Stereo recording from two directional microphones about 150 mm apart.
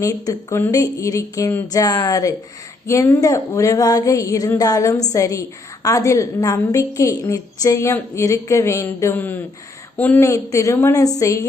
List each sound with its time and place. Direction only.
0.0 s a woman's voice: 20° left (ahead or behind)